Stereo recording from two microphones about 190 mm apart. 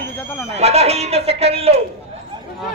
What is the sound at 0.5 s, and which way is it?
Speech, 35° right (ahead or behind).